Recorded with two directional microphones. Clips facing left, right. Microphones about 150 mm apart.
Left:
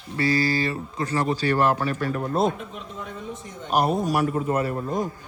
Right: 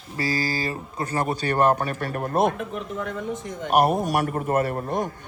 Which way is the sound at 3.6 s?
60° right (ahead or behind).